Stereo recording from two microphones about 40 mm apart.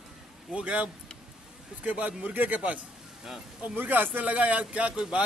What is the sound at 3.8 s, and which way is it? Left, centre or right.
A man's voice, right.